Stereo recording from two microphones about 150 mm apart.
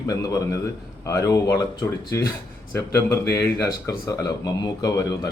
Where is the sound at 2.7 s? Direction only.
15° left (ahead or behind).